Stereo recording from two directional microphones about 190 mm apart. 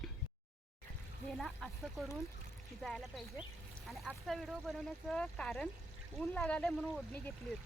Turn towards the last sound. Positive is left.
turn(degrees=0)  # may be behind; listen again after turning